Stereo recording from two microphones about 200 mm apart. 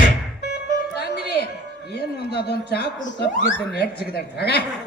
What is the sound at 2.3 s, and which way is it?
Speech, 55° left (ahead or behind).